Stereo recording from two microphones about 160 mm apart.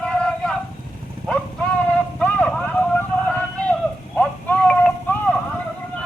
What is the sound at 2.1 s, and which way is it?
Vehicle, 5° left (ahead or behind).